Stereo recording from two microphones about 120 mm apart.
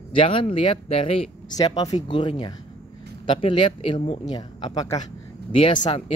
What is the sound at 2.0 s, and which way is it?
Speech, 40° left (ahead or behind).